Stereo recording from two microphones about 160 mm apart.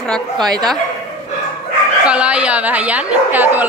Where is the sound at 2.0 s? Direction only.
5° right (ahead or behind).